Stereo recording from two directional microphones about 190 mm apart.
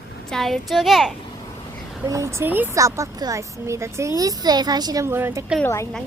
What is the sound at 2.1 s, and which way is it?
A woman's voice, 15° right (ahead or behind).